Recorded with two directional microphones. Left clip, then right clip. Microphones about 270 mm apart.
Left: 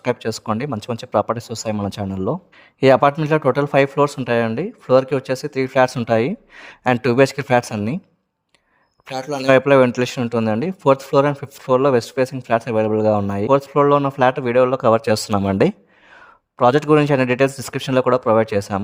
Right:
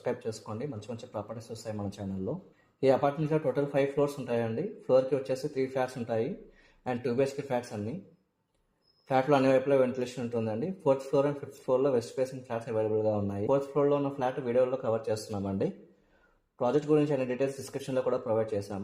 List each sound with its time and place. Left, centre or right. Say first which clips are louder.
0.0 s speech: left 12 dB; left
9.1 s a man's voice: even; centre
9.5 s speech: left 13 dB; left